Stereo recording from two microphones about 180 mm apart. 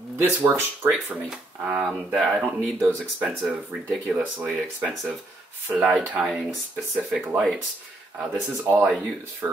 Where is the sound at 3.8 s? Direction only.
5° right (ahead or behind).